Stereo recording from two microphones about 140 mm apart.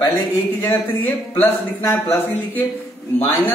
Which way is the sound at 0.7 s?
15° left (ahead or behind).